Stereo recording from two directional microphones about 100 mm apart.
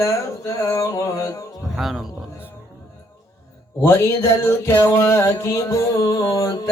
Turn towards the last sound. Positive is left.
turn(degrees=40)  # may be behind; listen again after turning